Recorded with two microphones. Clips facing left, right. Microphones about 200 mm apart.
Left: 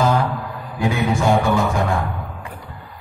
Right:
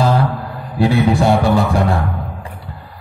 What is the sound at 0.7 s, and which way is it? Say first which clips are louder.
Speech: right 6 dB; 35° right (ahead or behind).